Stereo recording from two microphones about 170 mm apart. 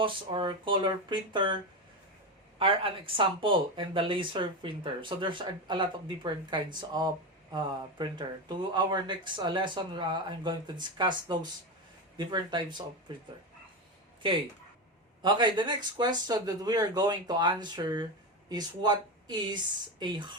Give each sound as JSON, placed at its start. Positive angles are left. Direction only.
{"t": 0.0, "sound": "speech", "side_deg": -30}
{"t": 15.2, "sound": "speech", "side_deg": -25}